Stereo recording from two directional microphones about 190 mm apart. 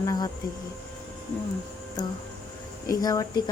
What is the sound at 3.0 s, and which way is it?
Speech, 20° left (ahead or behind).